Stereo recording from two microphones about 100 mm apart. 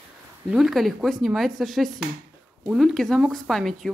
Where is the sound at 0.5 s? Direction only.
5° right (ahead or behind).